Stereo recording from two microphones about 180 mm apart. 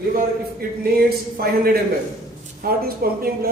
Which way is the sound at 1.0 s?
60° right (ahead or behind).